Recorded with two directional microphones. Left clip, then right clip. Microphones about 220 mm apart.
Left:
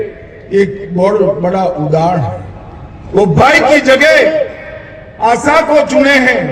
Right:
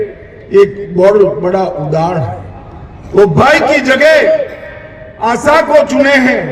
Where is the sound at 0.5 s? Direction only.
40° right (ahead or behind).